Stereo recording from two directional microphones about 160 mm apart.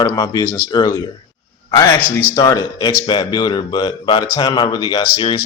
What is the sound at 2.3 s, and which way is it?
Speech, 25° left (ahead or behind).